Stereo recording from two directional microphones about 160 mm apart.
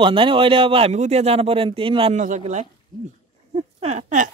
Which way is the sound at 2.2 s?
50° right (ahead or behind).